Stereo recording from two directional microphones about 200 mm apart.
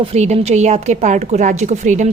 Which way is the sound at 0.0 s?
30° right (ahead or behind).